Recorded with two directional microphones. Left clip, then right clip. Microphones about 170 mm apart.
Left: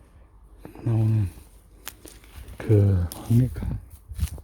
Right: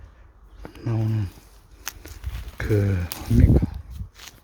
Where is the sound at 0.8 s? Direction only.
15° left (ahead or behind).